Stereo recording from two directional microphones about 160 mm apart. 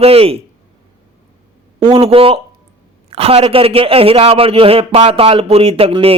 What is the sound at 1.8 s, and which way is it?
A man's voice, 35° right (ahead or behind).